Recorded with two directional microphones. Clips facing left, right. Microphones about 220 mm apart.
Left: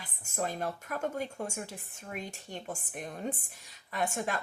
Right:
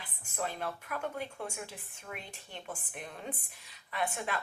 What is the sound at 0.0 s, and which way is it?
Speech, 45° left (ahead or behind).